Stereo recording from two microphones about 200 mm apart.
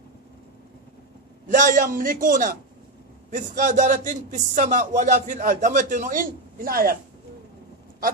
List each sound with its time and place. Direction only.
1.5 s a man's voice: 40° right (ahead or behind)